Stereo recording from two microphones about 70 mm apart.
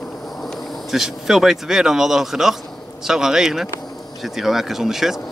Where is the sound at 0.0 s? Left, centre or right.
Centre.